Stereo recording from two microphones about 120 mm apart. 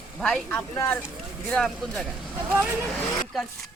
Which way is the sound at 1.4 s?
5° left (ahead or behind).